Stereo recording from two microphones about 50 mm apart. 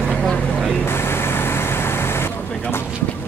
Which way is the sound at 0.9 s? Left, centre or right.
Left.